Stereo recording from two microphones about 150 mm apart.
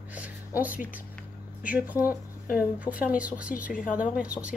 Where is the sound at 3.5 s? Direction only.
65° left (ahead or behind).